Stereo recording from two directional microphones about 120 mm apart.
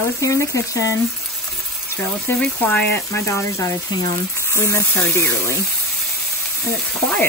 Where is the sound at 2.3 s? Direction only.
20° left (ahead or behind).